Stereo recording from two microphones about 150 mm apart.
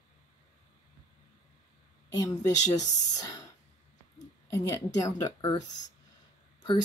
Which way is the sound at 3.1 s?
25° left (ahead or behind).